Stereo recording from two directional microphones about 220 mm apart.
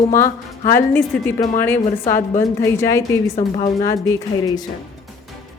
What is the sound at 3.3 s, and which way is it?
Speech, 30° left (ahead or behind).